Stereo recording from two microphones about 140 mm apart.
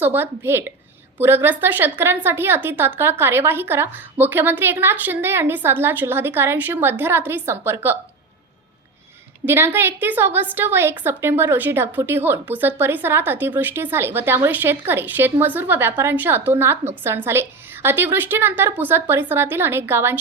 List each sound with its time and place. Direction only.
0.0 s a woman's voice: 15° right (ahead or behind)
9.5 s a woman's voice: 15° right (ahead or behind)